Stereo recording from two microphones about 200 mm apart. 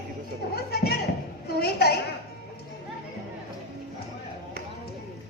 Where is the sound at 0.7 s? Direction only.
50° left (ahead or behind).